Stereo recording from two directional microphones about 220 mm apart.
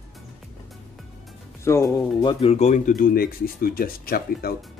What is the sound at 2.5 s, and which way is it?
Speech, 30° left (ahead or behind).